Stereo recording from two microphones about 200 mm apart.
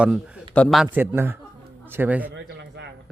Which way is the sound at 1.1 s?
10° right (ahead or behind).